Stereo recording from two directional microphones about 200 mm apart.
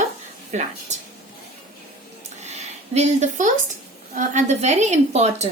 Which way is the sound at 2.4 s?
35° right (ahead or behind).